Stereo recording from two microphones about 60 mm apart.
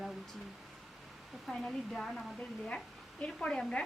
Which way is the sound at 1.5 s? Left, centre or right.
Centre.